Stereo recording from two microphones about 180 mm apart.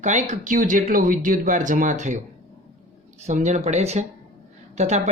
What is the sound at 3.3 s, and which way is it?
A woman's voice, 40° right (ahead or behind).